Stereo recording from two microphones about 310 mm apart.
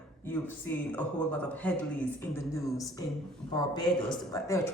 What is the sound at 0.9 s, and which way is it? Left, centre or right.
A man's voice, centre.